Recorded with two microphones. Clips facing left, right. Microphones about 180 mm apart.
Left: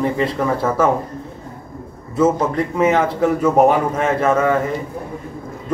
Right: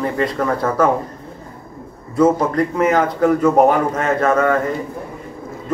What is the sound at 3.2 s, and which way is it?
Speech, 5° left (ahead or behind).